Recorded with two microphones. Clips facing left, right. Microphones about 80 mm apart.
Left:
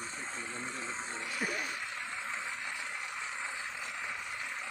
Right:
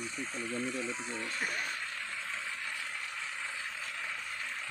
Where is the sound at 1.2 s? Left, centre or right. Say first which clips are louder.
Left 2 dB; centre.